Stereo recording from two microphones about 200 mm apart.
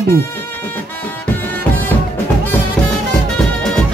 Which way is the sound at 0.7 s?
10° left (ahead or behind).